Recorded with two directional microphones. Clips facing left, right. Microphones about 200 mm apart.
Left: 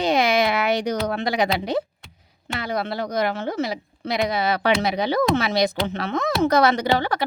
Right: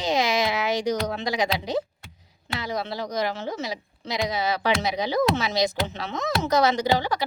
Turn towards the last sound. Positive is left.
turn(degrees=60)  # may be behind; listen again after turning